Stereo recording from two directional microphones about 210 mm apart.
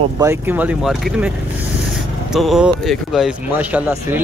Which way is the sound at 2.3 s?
Centre (ahead or behind).